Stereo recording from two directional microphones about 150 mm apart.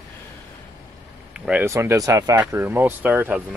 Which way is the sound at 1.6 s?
20° right (ahead or behind).